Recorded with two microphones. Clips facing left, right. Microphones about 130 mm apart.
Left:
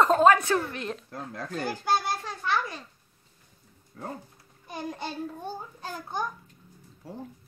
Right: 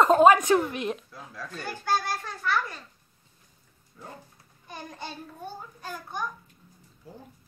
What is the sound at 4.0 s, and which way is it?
Speech, 70° left (ahead or behind).